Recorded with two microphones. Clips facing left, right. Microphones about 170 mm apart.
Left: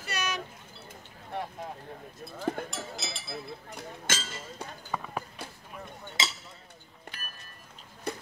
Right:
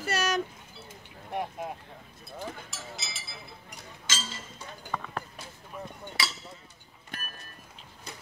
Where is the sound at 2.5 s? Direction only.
55° left (ahead or behind).